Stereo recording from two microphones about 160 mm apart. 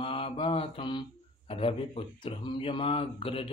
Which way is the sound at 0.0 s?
35° left (ahead or behind).